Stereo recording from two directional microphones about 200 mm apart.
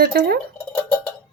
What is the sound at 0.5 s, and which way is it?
Cowbell, 10° left (ahead or behind).